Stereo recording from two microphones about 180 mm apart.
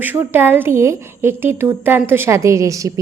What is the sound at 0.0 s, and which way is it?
A woman's voice, 10° right (ahead or behind).